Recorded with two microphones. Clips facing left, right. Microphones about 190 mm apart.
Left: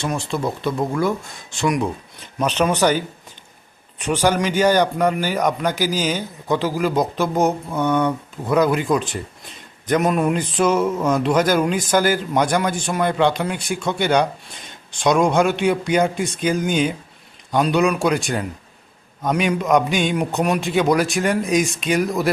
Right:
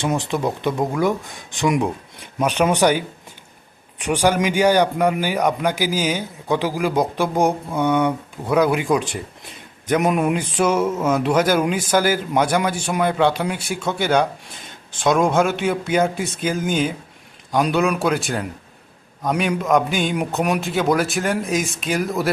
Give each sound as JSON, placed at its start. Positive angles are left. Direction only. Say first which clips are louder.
{"t": 0.0, "sound": "a man's voice", "louder": "right 2 dB", "side_deg": -15}